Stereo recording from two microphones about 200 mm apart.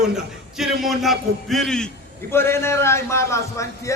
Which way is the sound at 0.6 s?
Centre (ahead or behind).